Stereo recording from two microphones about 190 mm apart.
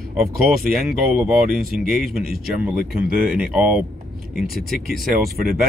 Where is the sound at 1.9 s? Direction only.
Centre (ahead or behind).